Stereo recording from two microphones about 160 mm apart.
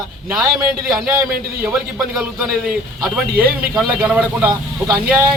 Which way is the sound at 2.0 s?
5° right (ahead or behind).